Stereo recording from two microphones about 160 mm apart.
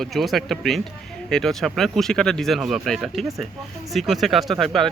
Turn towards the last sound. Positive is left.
turn(degrees=0)  # may be behind; listen again after turning